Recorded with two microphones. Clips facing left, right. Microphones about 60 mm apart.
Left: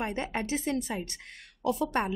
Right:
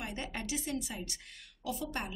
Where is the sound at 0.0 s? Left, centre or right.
Left.